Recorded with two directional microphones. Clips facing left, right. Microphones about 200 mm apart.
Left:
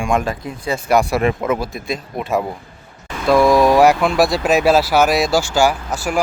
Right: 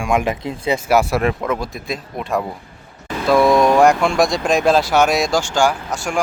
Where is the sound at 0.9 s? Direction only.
5° right (ahead or behind).